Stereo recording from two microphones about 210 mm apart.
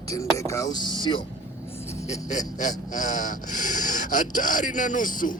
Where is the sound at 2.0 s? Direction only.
35° left (ahead or behind).